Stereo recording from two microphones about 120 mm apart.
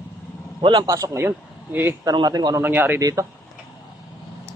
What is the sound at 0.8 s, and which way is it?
A man's voice, 25° right (ahead or behind).